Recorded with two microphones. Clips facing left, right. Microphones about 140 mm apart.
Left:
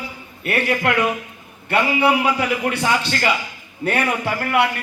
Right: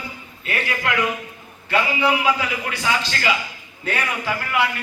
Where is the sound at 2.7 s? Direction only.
55° left (ahead or behind).